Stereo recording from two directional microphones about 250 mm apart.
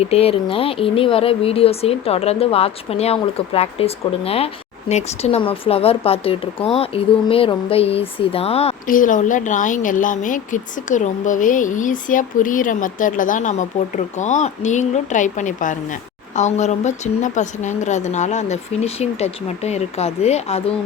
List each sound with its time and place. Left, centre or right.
0.0 s speech: left